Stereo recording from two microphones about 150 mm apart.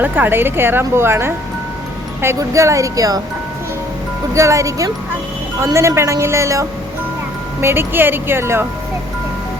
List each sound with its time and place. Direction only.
0.0 s a woman's voice: 15° right (ahead or behind)
4.4 s a woman's voice: 20° right (ahead or behind)